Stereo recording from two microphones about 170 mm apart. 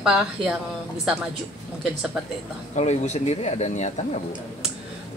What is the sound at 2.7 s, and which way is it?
Speech, 40° left (ahead or behind).